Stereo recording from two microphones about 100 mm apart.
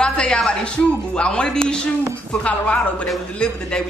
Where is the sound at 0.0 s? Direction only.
10° left (ahead or behind).